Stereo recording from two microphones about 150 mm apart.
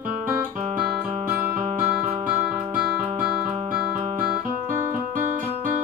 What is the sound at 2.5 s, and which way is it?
Music, 5° right (ahead or behind).